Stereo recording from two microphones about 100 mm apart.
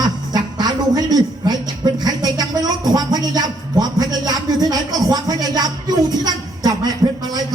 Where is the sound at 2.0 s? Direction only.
40° right (ahead or behind).